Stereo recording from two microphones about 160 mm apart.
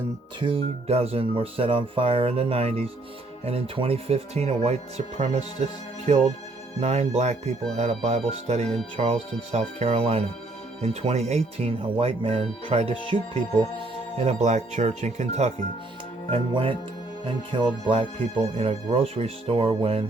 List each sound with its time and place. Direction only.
0.3 s speech: 35° right (ahead or behind)
14.2 s speech: 45° right (ahead or behind)
16.3 s speech: 30° right (ahead or behind)